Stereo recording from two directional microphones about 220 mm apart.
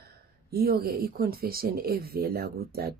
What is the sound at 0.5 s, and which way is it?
Speech, 45° right (ahead or behind).